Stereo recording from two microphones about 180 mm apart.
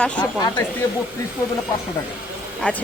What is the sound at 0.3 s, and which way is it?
Speech, 20° left (ahead or behind).